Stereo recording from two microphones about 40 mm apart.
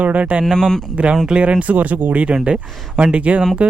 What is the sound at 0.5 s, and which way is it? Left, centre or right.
Speech, centre.